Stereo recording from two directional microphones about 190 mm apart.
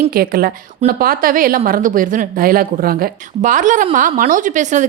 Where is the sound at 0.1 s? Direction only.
50° right (ahead or behind).